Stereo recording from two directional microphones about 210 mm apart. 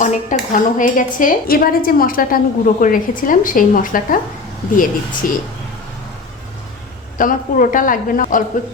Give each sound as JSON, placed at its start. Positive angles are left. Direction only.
{"t": 0.0, "sound": "speech", "side_deg": 35}
{"t": 5.2, "sound": "speech", "side_deg": 40}
{"t": 7.2, "sound": "speech", "side_deg": 40}